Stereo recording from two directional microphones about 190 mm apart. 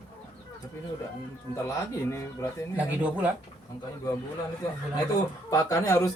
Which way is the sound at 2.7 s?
10° right (ahead or behind).